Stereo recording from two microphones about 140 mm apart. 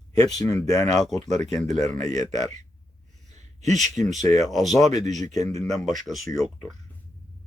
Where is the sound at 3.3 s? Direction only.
55° right (ahead or behind).